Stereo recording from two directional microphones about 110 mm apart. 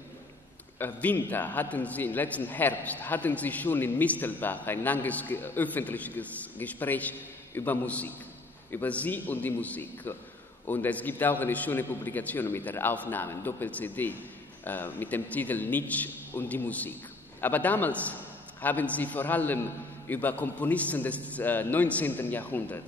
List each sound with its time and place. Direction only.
0.7 s a man's voice: 15° left (ahead or behind)